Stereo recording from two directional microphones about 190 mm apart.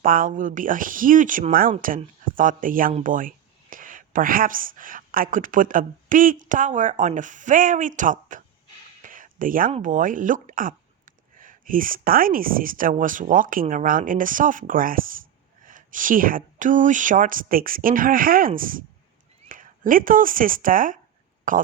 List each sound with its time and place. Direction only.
0.0 s speech: 45° right (ahead or behind)
9.0 s a sound: 45° right (ahead or behind)
9.7 s speech: 45° right (ahead or behind)